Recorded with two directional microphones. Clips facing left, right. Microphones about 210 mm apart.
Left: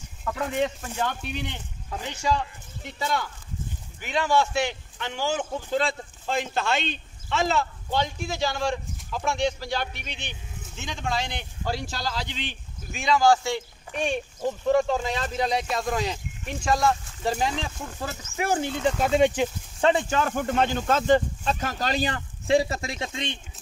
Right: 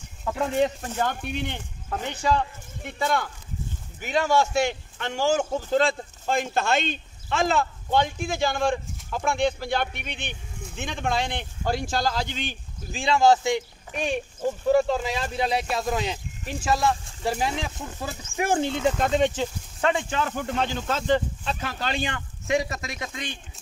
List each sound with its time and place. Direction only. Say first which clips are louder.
0.6 s speech: right 3 dB; 40° right (ahead or behind)
2.8 s speech: right 3 dB; 55° right (ahead or behind)
4.0 s speech: right 1 dB; 45° right (ahead or behind)
12.9 s speech: right 1 dB; 30° right (ahead or behind); by 17.6 s 5° right (ahead or behind)
18.5 s speech: right 2 dB; 20° right (ahead or behind)
18.9 s speech: left 2 dB; 5° left (ahead or behind)
19.8 s speech: left 3 dB; 35° left (ahead or behind)